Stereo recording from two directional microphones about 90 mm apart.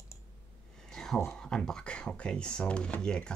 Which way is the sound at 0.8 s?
5° left (ahead or behind).